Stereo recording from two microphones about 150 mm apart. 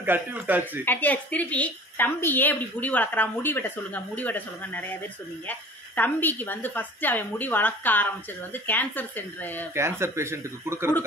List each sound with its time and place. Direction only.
0.0 s speech: 10° right (ahead or behind)
0.8 s a woman's voice: 10° left (ahead or behind)
9.8 s speech: 15° right (ahead or behind)